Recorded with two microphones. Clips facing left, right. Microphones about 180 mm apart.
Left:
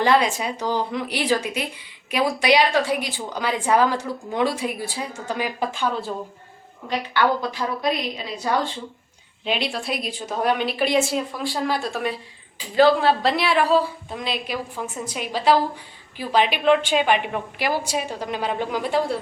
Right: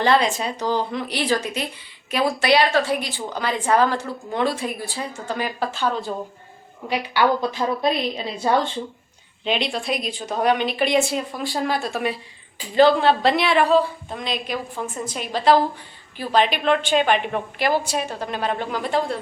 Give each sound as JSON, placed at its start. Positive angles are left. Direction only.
{"t": 0.0, "sound": "a woman's voice", "side_deg": 10}
{"t": 6.8, "sound": "a woman's voice", "side_deg": -10}
{"t": 7.5, "sound": "a woman's voice", "side_deg": -30}
{"t": 9.4, "sound": "a woman's voice", "side_deg": 5}